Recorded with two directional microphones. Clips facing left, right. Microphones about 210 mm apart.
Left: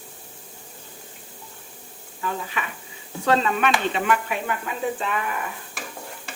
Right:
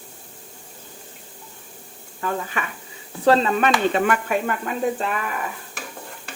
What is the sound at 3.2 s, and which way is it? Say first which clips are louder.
Speech: right 4 dB; 35° right (ahead or behind).